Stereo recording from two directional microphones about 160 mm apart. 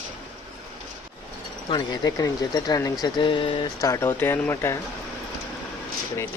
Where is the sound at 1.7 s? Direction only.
25° left (ahead or behind).